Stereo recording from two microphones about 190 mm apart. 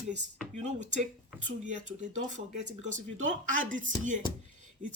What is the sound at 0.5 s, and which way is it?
Speech, 40° right (ahead or behind).